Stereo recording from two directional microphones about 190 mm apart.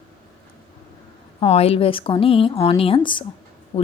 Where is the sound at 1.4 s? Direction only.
30° left (ahead or behind).